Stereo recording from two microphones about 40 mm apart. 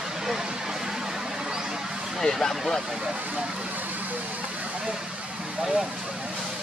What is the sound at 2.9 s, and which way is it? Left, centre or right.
Speech, centre.